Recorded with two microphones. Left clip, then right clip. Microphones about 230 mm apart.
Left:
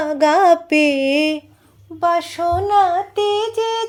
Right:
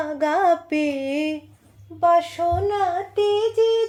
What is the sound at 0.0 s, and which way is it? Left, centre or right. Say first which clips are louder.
Music: left 6 dB; left.